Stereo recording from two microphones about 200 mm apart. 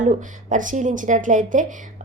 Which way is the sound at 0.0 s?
40° right (ahead or behind).